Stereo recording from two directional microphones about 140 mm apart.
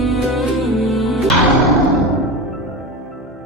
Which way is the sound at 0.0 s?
Centre (ahead or behind).